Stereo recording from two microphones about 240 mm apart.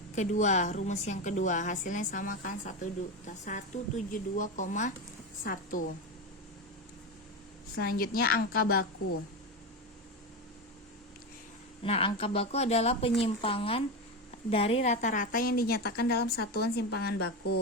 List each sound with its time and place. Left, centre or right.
0.2 s a woman's voice: left
7.8 s a woman's voice: left
11.8 s a woman's voice: left